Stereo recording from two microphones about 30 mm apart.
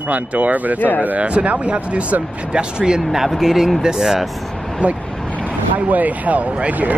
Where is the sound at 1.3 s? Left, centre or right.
Right.